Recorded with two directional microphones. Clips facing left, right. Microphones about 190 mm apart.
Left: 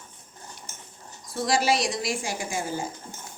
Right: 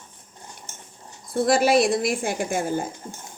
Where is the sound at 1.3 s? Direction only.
55° right (ahead or behind).